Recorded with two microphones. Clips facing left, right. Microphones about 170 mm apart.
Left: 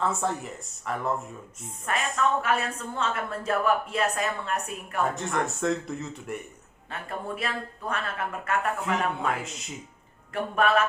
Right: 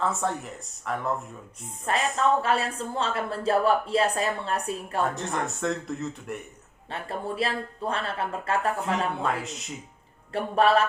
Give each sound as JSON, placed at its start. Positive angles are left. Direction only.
{"t": 0.0, "sound": "speech", "side_deg": 0}
{"t": 1.8, "sound": "a woman's voice", "side_deg": -30}
{"t": 5.0, "sound": "speech", "side_deg": 0}
{"t": 6.9, "sound": "a woman's voice", "side_deg": -30}
{"t": 8.8, "sound": "speech", "side_deg": 0}
{"t": 10.3, "sound": "a woman's voice", "side_deg": -30}